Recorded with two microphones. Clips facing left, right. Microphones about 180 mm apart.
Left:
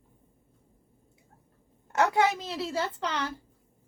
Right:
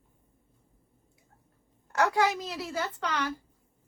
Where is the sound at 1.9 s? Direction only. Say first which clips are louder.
Left 1 dB; 20° left (ahead or behind).